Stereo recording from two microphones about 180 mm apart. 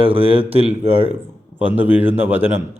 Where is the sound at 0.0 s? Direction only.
30° right (ahead or behind).